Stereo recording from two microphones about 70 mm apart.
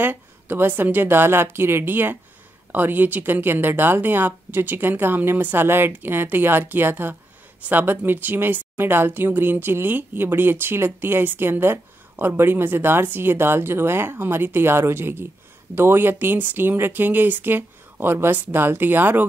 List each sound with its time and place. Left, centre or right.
0.0 s speech: right